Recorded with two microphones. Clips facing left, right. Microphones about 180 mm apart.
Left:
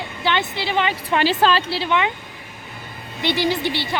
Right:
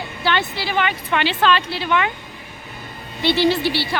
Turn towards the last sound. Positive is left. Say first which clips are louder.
# right 3 dB
turn(degrees=20)  # may be behind; listen again after turning